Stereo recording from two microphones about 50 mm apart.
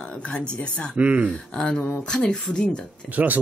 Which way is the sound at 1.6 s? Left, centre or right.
Centre.